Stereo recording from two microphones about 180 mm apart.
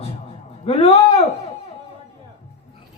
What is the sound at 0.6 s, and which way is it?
Speech, 35° left (ahead or behind).